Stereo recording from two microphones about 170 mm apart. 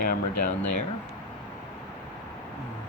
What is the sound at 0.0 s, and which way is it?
Speech, 55° left (ahead or behind).